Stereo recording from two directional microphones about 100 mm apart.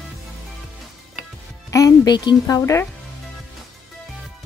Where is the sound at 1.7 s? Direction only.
35° left (ahead or behind).